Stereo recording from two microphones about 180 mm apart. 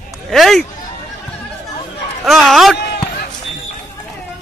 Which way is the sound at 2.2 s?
Centre (ahead or behind).